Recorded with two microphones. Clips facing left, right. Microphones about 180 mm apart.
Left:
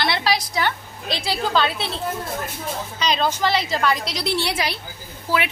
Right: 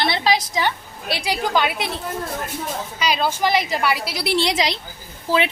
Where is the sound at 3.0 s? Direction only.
10° right (ahead or behind).